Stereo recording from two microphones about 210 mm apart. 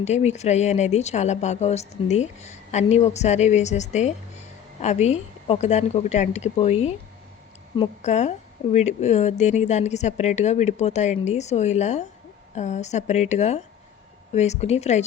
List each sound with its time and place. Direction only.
0.0 s a woman's voice: 30° left (ahead or behind)